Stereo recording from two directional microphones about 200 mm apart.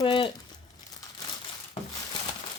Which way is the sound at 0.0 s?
25° left (ahead or behind).